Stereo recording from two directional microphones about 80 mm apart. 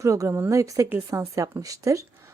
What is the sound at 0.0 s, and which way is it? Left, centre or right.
A woman's voice, right.